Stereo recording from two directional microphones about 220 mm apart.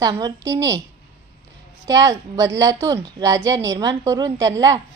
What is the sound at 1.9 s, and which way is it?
A woman's voice, 15° right (ahead or behind).